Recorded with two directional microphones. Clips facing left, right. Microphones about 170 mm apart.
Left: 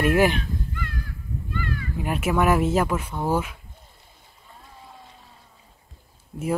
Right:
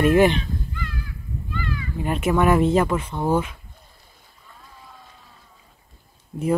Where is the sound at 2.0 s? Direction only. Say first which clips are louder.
Right 2 dB; 5° left (ahead or behind).